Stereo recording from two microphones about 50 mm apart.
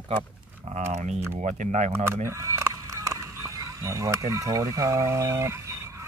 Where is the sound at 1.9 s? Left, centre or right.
Right.